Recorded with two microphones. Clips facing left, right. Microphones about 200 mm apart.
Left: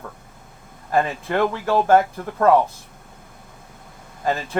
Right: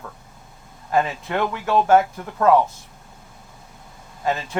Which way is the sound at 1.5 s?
35° left (ahead or behind).